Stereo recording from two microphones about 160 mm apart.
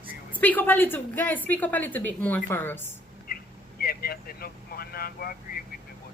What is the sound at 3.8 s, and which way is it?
Speech, 70° left (ahead or behind).